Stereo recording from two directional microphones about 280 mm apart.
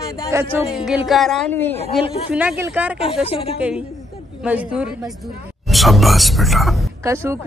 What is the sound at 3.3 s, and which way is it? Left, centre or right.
Speech, left.